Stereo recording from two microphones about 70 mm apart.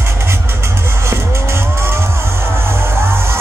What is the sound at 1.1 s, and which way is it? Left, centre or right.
Vehicle, right.